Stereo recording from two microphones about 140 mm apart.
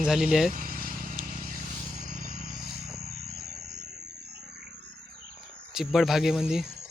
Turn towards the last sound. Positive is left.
turn(degrees=-5)  # may be behind; listen again after turning